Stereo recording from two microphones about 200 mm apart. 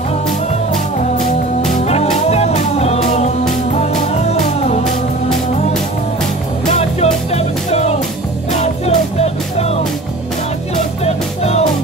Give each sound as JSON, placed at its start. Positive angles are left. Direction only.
{"t": 1.7, "sound": "music", "side_deg": 30}
{"t": 7.2, "sound": "music", "side_deg": 30}
{"t": 11.1, "sound": "music", "side_deg": 30}